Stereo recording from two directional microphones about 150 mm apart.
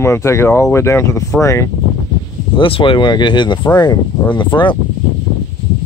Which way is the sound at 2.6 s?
35° left (ahead or behind).